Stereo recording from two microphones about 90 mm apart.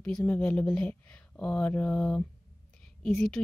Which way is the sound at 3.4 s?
15° left (ahead or behind).